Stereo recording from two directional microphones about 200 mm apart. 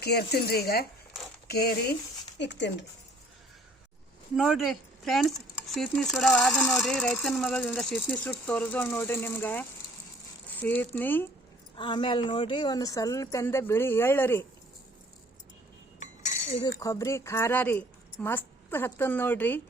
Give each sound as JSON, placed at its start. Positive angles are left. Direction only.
{"t": 0.0, "sound": "speech", "side_deg": 55}
{"t": 4.4, "sound": "speech", "side_deg": 0}
{"t": 11.8, "sound": "speech", "side_deg": 25}
{"t": 16.0, "sound": "cutlery", "side_deg": 35}
{"t": 16.8, "sound": "speech", "side_deg": 15}